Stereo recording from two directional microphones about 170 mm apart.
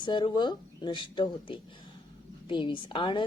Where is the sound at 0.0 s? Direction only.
25° left (ahead or behind).